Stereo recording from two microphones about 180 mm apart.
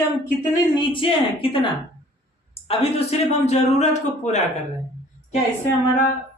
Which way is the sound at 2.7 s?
35° left (ahead or behind).